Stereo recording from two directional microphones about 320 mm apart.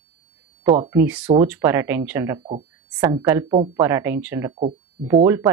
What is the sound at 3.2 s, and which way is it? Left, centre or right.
Speech, centre.